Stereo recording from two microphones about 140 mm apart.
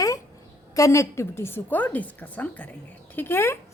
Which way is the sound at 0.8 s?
20° left (ahead or behind).